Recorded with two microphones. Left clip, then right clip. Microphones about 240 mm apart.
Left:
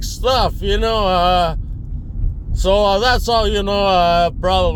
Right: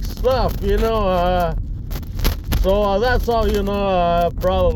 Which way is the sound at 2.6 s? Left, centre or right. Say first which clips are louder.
Left 3 dB; left.